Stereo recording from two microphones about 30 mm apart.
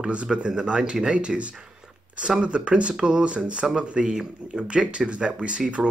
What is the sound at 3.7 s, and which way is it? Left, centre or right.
Speech, right.